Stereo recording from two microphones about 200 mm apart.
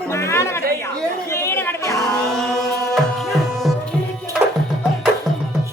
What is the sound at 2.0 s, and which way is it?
Music, centre (ahead or behind).